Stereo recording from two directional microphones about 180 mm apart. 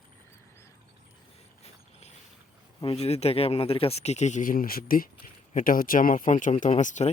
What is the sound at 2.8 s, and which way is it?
Speech, 35° left (ahead or behind).